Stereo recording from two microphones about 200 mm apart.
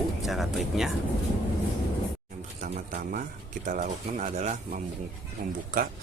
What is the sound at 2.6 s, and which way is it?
Speech, 40° right (ahead or behind).